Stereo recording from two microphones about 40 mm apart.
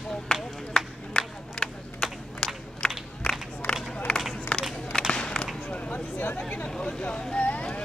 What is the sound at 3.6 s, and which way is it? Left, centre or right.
Run, left.